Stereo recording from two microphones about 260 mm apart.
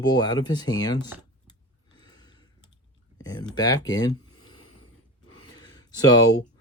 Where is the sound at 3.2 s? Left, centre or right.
Centre.